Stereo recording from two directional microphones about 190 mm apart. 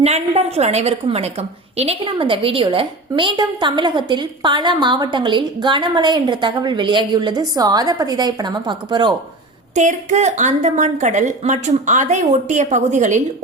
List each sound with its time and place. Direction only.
0.0 s a woman's voice: 35° right (ahead or behind)
9.7 s a woman's voice: 40° right (ahead or behind)